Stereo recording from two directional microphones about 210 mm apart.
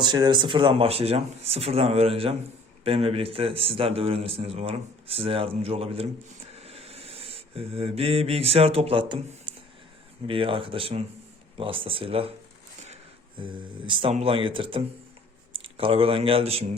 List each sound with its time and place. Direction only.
0.0 s a man's voice: 20° right (ahead or behind)
10.2 s a man's voice: 25° right (ahead or behind)
13.4 s a man's voice: 25° right (ahead or behind)